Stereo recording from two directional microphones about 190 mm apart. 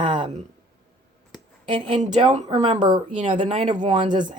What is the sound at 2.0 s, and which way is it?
Speech, 35° right (ahead or behind).